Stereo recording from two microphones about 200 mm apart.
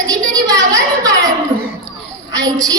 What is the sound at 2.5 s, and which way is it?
Speech, 20° right (ahead or behind).